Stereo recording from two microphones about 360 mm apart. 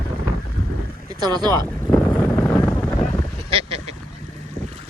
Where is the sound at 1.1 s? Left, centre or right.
Centre.